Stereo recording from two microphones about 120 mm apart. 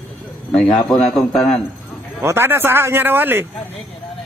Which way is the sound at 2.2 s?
20° right (ahead or behind).